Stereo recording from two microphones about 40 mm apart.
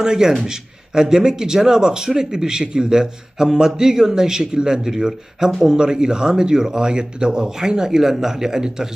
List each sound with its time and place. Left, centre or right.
0.0 s a man's voice: centre